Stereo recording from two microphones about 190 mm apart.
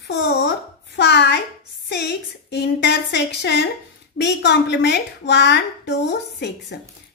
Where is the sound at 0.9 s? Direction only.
60° left (ahead or behind).